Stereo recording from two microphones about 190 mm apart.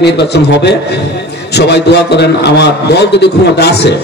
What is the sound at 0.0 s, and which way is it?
A man's voice, 60° left (ahead or behind).